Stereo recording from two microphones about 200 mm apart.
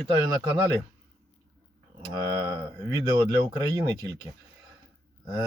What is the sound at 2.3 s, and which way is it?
Speech, 20° right (ahead or behind).